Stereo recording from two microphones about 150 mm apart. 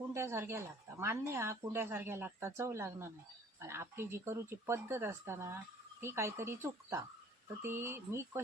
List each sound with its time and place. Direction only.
0.1 s speech: 15° right (ahead or behind)